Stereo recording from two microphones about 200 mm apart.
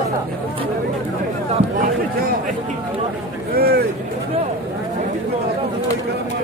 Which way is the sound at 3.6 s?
50° right (ahead or behind).